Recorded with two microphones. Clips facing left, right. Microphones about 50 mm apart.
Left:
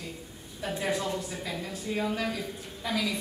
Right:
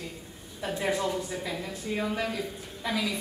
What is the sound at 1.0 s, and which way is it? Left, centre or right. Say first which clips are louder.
A man's voice: right 2 dB; centre.